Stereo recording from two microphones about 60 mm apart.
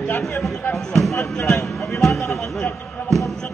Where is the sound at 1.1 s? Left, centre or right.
Left.